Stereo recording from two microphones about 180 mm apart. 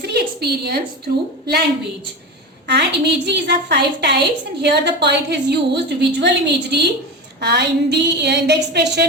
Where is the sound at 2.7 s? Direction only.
70° right (ahead or behind).